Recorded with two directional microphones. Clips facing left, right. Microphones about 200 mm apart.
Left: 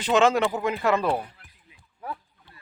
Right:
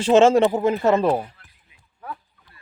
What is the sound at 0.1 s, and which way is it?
Speech, 30° right (ahead or behind).